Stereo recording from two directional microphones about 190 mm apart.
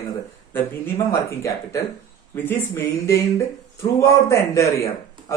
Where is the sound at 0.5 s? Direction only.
10° left (ahead or behind).